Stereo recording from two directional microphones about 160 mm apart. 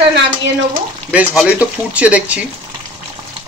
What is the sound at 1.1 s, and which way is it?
Speech, 5° right (ahead or behind).